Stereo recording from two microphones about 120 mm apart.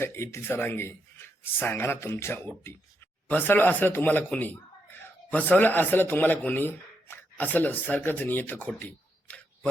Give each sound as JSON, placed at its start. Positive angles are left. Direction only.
{"t": 0.0, "sound": "a man's voice", "side_deg": 20}